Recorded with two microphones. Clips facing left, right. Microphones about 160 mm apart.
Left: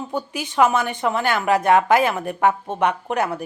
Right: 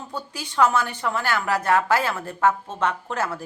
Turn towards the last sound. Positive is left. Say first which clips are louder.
# left 4 dB
turn(degrees=15)  # may be behind; listen again after turning